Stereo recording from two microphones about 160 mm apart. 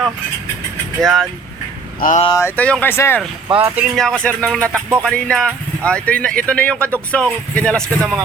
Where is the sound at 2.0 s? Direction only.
55° left (ahead or behind).